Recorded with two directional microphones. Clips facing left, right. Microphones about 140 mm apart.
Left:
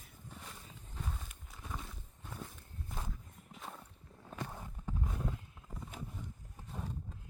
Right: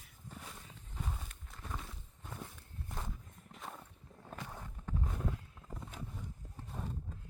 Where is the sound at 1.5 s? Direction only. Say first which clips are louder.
Even; centre (ahead or behind).